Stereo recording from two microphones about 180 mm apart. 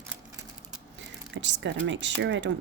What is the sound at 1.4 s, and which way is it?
Speech, 90° right.